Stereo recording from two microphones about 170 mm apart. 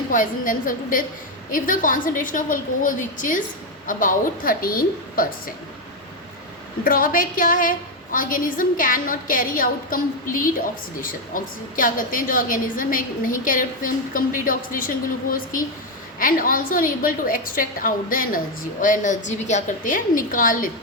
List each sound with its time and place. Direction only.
0.1 s a woman's voice: 50° left (ahead or behind)
6.8 s a woman's voice: 55° left (ahead or behind)